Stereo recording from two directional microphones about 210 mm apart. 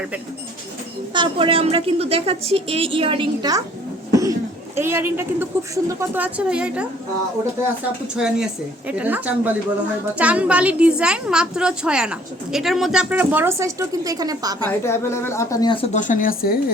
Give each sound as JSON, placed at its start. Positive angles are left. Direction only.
{"t": 1.1, "sound": "a woman's voice", "side_deg": -25}
{"t": 4.1, "sound": "cough", "side_deg": -15}
{"t": 4.8, "sound": "a woman's voice", "side_deg": -10}
{"t": 8.1, "sound": "a woman's voice", "side_deg": -5}
{"t": 14.8, "sound": "a woman's voice", "side_deg": 10}